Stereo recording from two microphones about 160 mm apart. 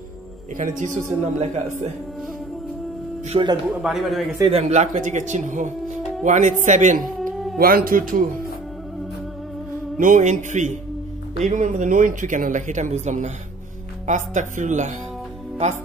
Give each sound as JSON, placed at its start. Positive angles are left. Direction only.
{"t": 0.6, "sound": "speech", "side_deg": -55}
{"t": 3.3, "sound": "speech", "side_deg": -30}
{"t": 3.8, "sound": "speech", "side_deg": 0}
{"t": 4.5, "sound": "speech", "side_deg": -40}
{"t": 7.0, "sound": "cat", "side_deg": 0}
{"t": 7.5, "sound": "speech", "side_deg": -65}
{"t": 9.9, "sound": "speech", "side_deg": -55}